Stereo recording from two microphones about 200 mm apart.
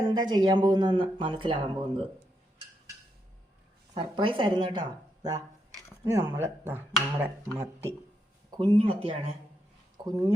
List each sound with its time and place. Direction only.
0.1 s speech: 20° right (ahead or behind)
3.9 s speech: 25° right (ahead or behind)
8.4 s speech: 25° right (ahead or behind)
10.0 s a sound: 20° right (ahead or behind)